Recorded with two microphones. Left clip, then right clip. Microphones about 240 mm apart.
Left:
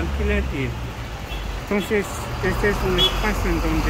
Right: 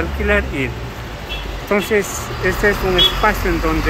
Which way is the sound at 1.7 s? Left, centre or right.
Centre.